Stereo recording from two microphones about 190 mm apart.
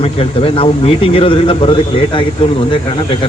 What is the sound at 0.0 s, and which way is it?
Speech, 30° left (ahead or behind).